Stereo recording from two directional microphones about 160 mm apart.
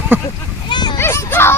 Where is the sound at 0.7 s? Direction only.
25° left (ahead or behind).